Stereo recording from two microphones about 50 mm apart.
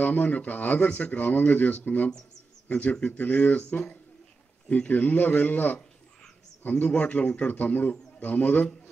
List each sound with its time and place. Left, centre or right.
0.0 s speech: left